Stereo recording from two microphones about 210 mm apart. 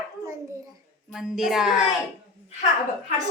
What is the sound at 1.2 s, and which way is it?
Speech, centre (ahead or behind).